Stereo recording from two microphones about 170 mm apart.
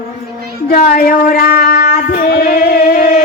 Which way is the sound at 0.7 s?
60° left (ahead or behind).